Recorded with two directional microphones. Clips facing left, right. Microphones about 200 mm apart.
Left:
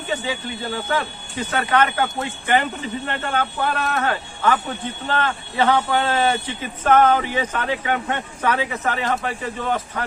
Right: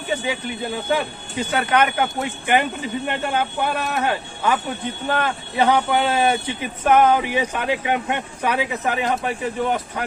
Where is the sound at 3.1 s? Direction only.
15° right (ahead or behind).